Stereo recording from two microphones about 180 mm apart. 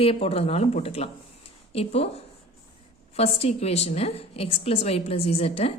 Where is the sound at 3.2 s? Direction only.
35° left (ahead or behind).